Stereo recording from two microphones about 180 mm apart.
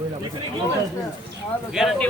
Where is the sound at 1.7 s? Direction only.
Centre (ahead or behind).